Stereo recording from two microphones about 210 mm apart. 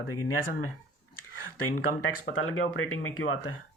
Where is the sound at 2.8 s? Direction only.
85° left.